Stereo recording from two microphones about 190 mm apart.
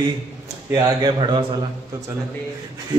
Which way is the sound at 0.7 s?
25° right (ahead or behind).